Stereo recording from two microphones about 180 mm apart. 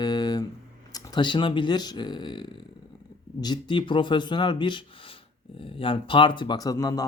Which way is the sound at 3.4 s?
25° left (ahead or behind).